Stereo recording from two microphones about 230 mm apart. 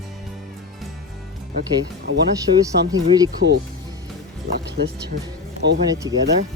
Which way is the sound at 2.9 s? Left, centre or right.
Centre.